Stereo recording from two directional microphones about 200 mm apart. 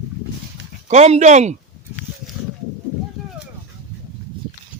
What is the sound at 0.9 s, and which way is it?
Speech, 35° right (ahead or behind).